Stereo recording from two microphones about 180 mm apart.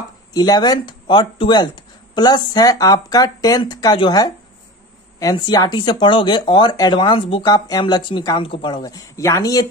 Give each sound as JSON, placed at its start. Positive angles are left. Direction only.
{"t": 0.3, "sound": "speech", "side_deg": 20}